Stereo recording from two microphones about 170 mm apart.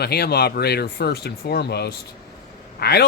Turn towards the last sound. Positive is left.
turn(degrees=70)  # may be behind; listen again after turning